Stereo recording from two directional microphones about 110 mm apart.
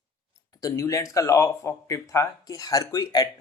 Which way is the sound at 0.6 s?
30° left (ahead or behind).